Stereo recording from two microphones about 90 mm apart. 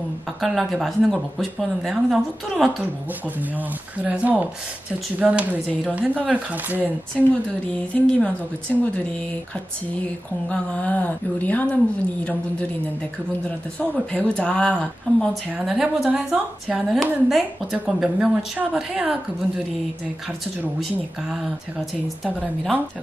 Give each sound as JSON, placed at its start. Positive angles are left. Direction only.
{"t": 0.4, "sound": "speech", "side_deg": 0}
{"t": 3.3, "sound": "speech", "side_deg": -20}
{"t": 7.2, "sound": "speech", "side_deg": 5}
{"t": 10.5, "sound": "speech", "side_deg": 15}
{"t": 13.7, "sound": "speech", "side_deg": 15}
{"t": 15.6, "sound": "speech", "side_deg": -5}
{"t": 22.2, "sound": "speech", "side_deg": -10}